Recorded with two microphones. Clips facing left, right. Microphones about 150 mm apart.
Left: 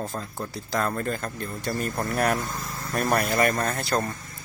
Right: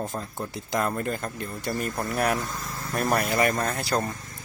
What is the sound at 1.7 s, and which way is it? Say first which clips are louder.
Speech: left 1 dB; centre (ahead or behind).